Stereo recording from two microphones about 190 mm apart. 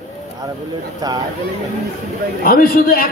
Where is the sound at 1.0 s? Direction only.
20° right (ahead or behind).